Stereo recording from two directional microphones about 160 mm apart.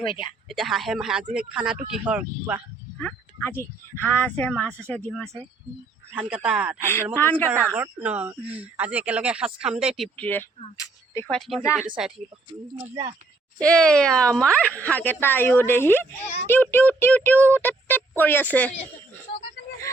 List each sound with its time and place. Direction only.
0.0 s speech: 30° left (ahead or behind)
0.4 s speech: centre (ahead or behind)
3.0 s speech: 10° left (ahead or behind)
6.1 s speech: 5° right (ahead or behind)
6.8 s speech: 15° left (ahead or behind)
7.5 s speech: 10° right (ahead or behind)
10.2 s speech: 10° left (ahead or behind)
10.8 s a sound: 20° left (ahead or behind)
11.3 s speech: centre (ahead or behind)
13.6 s speech: 5° left (ahead or behind)
16.2 s speech: 45° left (ahead or behind)
16.5 s speech: 10° left (ahead or behind)